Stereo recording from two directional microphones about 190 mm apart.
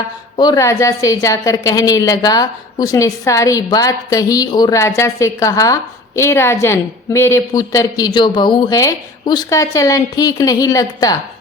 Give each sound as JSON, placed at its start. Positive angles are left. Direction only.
{"t": 0.3, "sound": "a woman's voice", "side_deg": 20}